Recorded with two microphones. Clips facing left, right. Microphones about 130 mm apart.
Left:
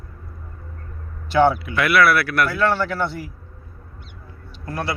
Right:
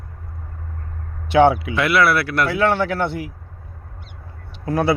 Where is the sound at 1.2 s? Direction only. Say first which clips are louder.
Right 3 dB; 65° right (ahead or behind).